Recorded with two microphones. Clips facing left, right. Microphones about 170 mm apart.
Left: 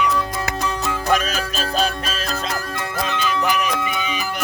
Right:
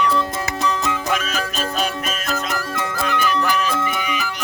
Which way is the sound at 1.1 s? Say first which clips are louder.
Left 3 dB; 35° left (ahead or behind).